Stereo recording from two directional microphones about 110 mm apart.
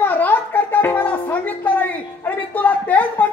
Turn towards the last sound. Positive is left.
turn(degrees=15)  # may be behind; listen again after turning